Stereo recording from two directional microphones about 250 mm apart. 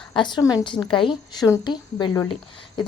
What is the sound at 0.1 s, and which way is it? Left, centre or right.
A woman's voice, centre.